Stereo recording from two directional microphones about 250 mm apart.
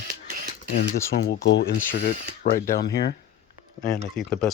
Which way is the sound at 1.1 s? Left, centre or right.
Left.